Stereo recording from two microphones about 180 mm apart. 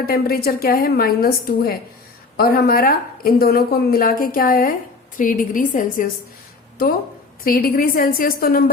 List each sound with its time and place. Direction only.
0.0 s a woman's voice: 60° left (ahead or behind)
7.4 s a woman's voice: 55° left (ahead or behind)